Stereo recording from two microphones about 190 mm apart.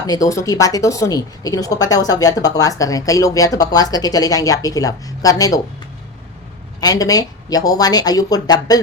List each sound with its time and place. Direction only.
0.1 s a woman's voice: 15° left (ahead or behind)
6.7 s a woman's voice: 20° left (ahead or behind)